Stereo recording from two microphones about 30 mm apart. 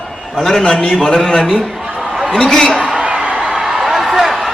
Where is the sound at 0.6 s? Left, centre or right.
Left.